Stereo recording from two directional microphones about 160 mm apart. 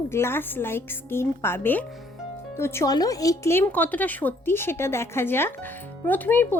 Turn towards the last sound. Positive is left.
turn(degrees=10)  # may be behind; listen again after turning